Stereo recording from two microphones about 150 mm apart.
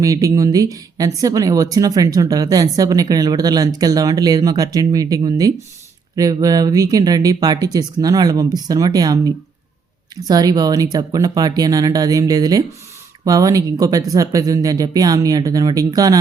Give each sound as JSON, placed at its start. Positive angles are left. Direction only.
{"t": 0.0, "sound": "speech", "side_deg": -20}